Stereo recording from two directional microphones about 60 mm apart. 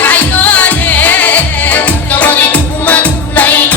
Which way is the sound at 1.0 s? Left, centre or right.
Left.